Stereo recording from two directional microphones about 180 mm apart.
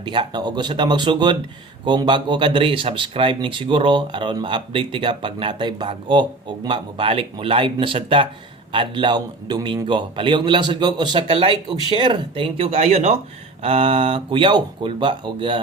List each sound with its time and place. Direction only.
0.0 s speech: 25° right (ahead or behind)